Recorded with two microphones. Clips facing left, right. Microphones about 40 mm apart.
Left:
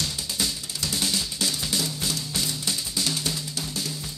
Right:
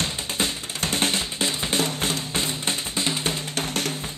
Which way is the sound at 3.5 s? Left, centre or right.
Right.